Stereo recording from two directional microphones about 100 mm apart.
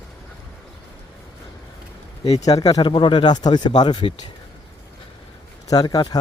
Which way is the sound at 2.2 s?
40° left (ahead or behind).